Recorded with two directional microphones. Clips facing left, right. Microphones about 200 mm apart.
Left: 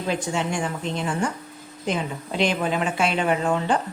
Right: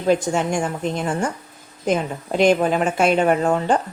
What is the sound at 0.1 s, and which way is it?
A woman's voice, 45° right (ahead or behind).